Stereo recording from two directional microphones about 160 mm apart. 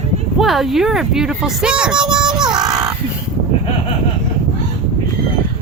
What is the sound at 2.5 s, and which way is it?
Child singing, 25° right (ahead or behind).